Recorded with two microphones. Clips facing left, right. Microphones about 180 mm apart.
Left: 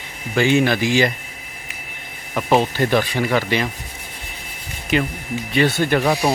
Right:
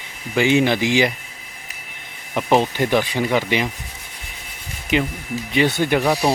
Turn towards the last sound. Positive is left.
turn(degrees=0)  # may be behind; listen again after turning